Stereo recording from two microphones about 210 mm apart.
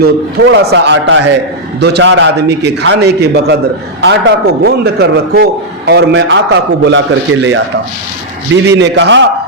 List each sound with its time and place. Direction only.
0.0 s a man's voice: 50° right (ahead or behind)
8.6 s a man's voice: 55° right (ahead or behind)